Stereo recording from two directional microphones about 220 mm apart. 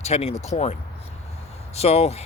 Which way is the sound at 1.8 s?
30° left (ahead or behind).